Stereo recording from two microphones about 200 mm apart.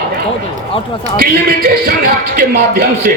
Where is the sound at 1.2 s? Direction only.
45° right (ahead or behind).